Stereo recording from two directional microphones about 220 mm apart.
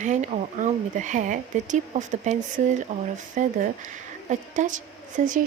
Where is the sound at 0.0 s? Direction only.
35° right (ahead or behind).